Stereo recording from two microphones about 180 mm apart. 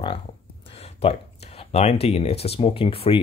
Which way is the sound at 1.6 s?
35° left (ahead or behind).